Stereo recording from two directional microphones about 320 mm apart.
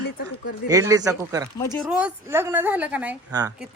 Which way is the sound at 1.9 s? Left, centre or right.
Centre.